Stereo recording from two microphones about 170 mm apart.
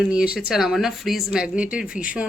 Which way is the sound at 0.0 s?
5° right (ahead or behind).